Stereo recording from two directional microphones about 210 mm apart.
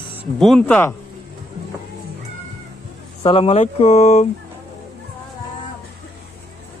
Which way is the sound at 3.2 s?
30° left (ahead or behind).